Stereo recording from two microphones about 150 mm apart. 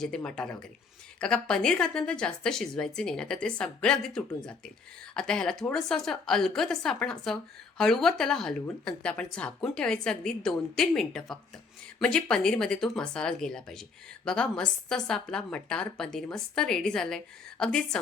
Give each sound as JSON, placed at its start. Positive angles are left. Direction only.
{"t": 0.0, "sound": "a woman's voice", "side_deg": 5}